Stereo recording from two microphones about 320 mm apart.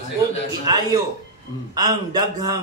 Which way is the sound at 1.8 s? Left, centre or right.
Centre.